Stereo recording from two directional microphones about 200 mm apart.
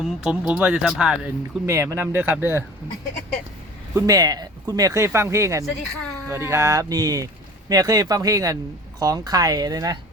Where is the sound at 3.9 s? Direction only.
15° right (ahead or behind).